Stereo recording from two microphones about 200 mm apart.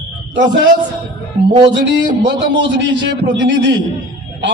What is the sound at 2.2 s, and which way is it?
A man's voice, 60° right (ahead or behind).